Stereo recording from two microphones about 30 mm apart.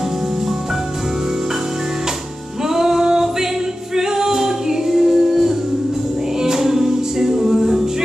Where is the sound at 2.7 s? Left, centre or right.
Centre.